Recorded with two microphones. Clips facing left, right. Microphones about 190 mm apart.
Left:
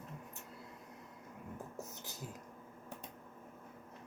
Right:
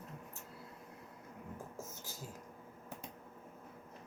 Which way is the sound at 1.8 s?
20° left (ahead or behind).